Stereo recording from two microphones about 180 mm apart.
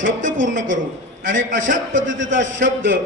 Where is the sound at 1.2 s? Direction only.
90° right.